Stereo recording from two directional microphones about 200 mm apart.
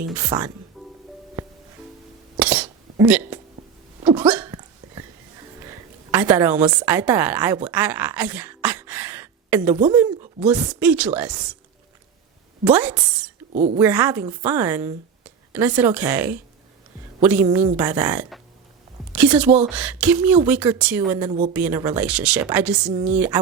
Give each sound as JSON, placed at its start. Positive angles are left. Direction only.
{"t": 0.2, "sound": "speech", "side_deg": -20}
{"t": 0.8, "sound": "music", "side_deg": 0}
{"t": 2.4, "sound": "cough", "side_deg": -5}
{"t": 4.2, "sound": "hiccup", "side_deg": -5}
{"t": 5.6, "sound": "a sound", "side_deg": -10}
{"t": 6.7, "sound": "speech", "side_deg": -5}
{"t": 12.6, "sound": "speech", "side_deg": -5}
{"t": 13.5, "sound": "a woman's voice", "side_deg": -35}
{"t": 13.7, "sound": "speech", "side_deg": -10}
{"t": 18.1, "sound": "speech", "side_deg": -5}